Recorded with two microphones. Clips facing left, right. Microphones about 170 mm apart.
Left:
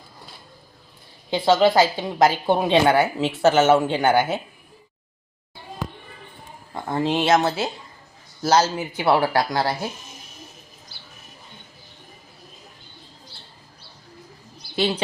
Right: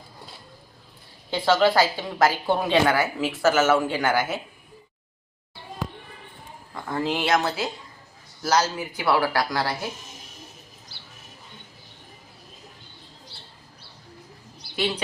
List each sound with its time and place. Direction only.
1.3 s a woman's voice: 20° left (ahead or behind)
6.7 s a woman's voice: 25° left (ahead or behind)
14.8 s a woman's voice: 30° left (ahead or behind)